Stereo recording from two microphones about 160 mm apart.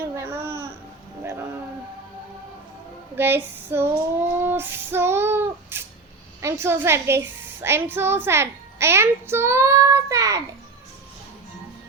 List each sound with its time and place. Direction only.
0.0 s babbling: 15° right (ahead or behind)
1.2 s a sound: 15° right (ahead or behind)
3.2 s a woman's voice: 15° right (ahead or behind)